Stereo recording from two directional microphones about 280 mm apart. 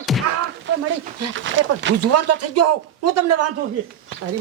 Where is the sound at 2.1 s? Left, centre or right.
Right.